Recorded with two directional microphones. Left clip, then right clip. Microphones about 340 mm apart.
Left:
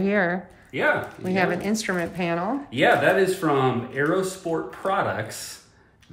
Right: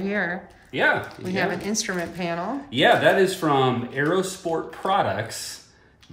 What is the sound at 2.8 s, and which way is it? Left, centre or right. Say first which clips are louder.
Speech: right 1 dB; right.